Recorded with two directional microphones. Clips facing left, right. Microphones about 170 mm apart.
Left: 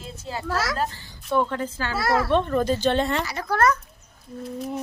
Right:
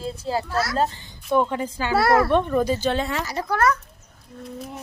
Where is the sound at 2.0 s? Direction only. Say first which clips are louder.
Right 5 dB; 60° right (ahead or behind).